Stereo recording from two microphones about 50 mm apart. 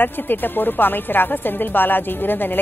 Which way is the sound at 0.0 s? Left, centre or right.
Left.